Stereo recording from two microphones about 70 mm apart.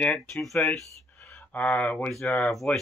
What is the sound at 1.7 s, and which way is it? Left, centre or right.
Speech, centre.